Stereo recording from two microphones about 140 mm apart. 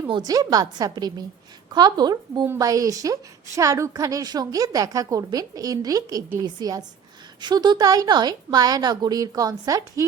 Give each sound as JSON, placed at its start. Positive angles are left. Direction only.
{"t": 0.1, "sound": "a woman's voice", "side_deg": -30}